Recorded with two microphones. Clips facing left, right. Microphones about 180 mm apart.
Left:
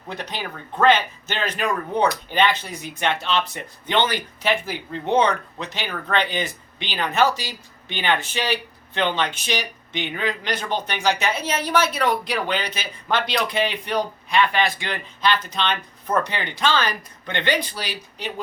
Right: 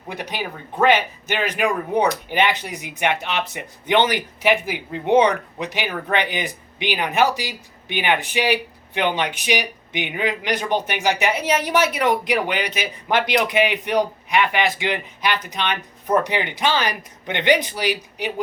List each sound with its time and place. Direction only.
0.1 s speech: 15° right (ahead or behind)